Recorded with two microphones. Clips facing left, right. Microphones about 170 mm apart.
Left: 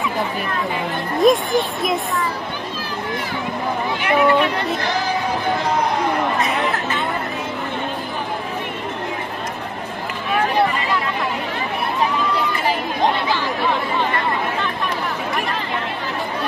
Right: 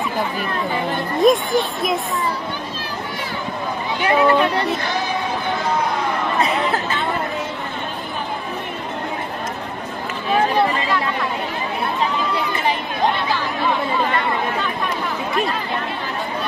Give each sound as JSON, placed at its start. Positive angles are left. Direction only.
{"t": 1.1, "sound": "speech", "side_deg": 0}
{"t": 4.0, "sound": "speech", "side_deg": -25}